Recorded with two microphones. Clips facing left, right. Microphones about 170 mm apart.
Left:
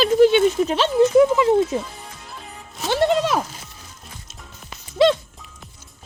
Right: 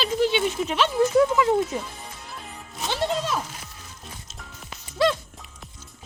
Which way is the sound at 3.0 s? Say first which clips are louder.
Left 7 dB; 75° left (ahead or behind).